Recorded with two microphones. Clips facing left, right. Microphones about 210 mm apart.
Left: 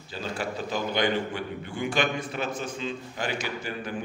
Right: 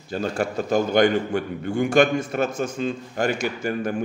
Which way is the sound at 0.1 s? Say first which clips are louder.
Right 7 dB; 50° right (ahead or behind).